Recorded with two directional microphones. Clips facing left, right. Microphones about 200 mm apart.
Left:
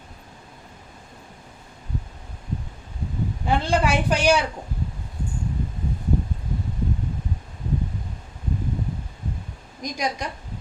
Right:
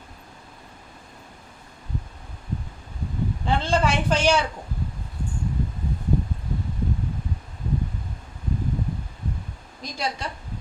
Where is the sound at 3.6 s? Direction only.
15° left (ahead or behind).